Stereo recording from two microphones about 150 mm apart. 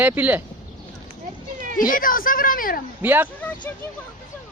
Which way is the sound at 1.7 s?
65° left (ahead or behind).